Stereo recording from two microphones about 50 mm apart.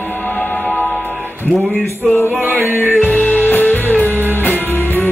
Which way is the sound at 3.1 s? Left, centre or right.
Left.